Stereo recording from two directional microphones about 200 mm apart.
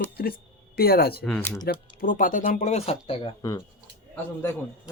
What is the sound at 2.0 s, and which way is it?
Speech, 40° left (ahead or behind).